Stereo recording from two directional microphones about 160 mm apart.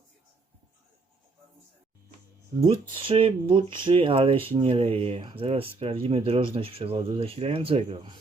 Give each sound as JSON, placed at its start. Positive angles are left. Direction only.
{"t": 2.6, "sound": "speech", "side_deg": -35}